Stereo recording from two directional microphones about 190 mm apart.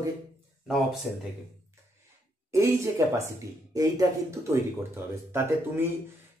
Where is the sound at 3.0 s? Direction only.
15° right (ahead or behind).